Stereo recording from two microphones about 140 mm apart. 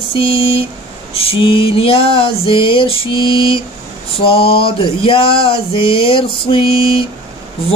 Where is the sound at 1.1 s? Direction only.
40° left (ahead or behind).